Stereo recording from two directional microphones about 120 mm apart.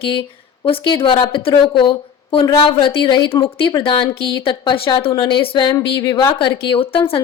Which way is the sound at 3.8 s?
50° left (ahead or behind).